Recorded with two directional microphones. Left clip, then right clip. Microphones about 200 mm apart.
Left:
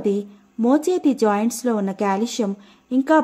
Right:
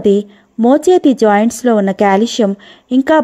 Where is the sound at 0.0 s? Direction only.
30° right (ahead or behind).